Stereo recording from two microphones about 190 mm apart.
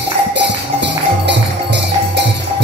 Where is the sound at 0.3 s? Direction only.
65° right (ahead or behind).